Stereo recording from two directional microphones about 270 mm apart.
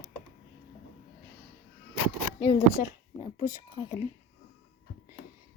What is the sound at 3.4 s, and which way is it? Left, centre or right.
Speech, centre.